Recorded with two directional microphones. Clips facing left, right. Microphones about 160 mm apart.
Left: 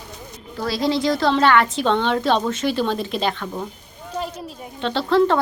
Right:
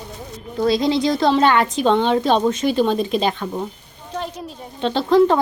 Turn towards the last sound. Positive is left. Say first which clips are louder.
# right 3 dB
turn(degrees=-15)  # may be behind; listen again after turning